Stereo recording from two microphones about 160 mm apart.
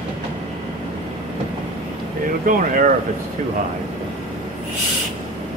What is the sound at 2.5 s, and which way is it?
Speech, 55° right (ahead or behind).